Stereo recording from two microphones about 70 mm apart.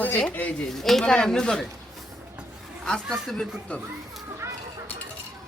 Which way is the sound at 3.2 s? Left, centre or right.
Centre.